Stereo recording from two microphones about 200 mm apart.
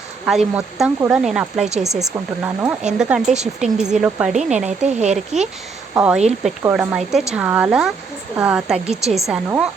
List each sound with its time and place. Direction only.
0.3 s speech: centre (ahead or behind)
4.9 s speech: 35° right (ahead or behind)
5.1 s speech: centre (ahead or behind)